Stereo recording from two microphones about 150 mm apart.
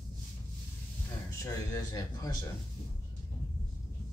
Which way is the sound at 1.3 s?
20° left (ahead or behind).